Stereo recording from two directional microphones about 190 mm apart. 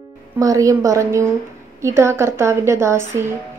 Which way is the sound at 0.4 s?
15° right (ahead or behind).